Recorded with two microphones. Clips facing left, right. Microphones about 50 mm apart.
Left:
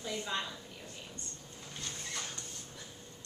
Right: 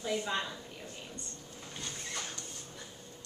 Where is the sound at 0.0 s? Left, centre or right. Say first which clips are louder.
Right 3 dB; centre.